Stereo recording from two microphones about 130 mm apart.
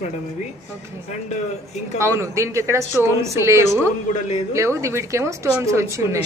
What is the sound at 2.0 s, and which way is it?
Speech, 20° right (ahead or behind).